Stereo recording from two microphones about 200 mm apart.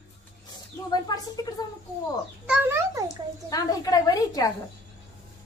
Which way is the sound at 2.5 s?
10° right (ahead or behind).